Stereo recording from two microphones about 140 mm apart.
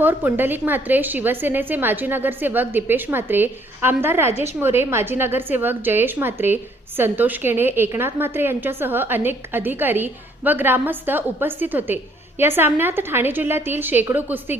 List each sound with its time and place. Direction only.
0.0 s a woman's voice: 15° right (ahead or behind)